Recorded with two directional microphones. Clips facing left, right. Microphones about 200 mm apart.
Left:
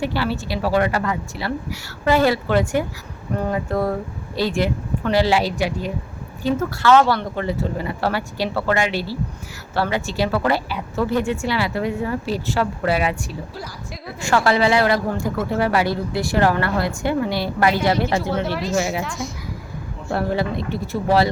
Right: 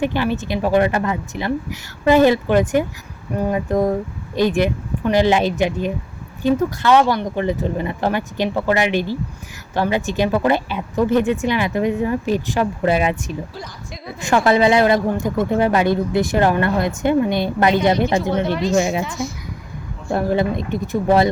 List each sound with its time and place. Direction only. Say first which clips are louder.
0.0 s a woman's voice: right 3 dB; 20° right (ahead or behind)
18.5 s a woman's voice: right 4 dB; 5° left (ahead or behind)
18.8 s a woman's voice: right 2 dB; 20° right (ahead or behind)
19.0 s a woman's voice: right 3 dB; centre (ahead or behind)
20.1 s a woman's voice: right 3 dB; 20° right (ahead or behind)